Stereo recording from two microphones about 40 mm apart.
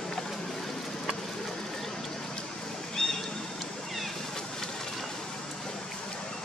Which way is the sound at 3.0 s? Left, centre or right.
Centre.